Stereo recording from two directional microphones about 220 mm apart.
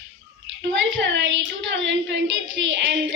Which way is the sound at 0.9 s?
55° right (ahead or behind).